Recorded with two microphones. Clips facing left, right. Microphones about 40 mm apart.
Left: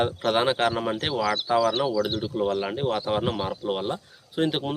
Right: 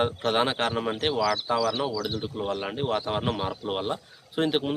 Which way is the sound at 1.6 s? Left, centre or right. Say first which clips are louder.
Left 3 dB; left.